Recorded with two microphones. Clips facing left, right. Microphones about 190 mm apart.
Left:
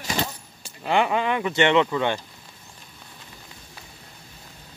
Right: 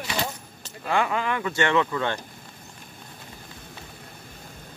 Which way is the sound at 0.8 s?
20° left (ahead or behind).